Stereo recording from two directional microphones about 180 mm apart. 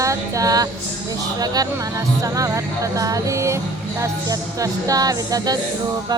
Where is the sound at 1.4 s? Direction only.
20° right (ahead or behind).